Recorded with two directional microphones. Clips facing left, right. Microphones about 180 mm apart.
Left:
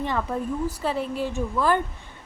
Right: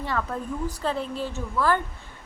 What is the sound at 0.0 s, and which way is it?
A woman's voice, 20° left (ahead or behind).